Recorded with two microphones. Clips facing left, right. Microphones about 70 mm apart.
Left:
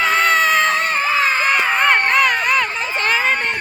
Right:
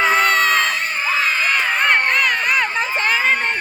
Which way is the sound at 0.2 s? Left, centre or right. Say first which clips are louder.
Left 1 dB; centre.